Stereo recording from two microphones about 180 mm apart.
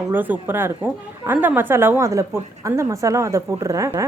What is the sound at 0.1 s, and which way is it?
A woman's voice, 10° right (ahead or behind).